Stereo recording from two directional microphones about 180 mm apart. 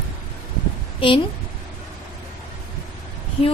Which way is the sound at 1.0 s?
30° left (ahead or behind).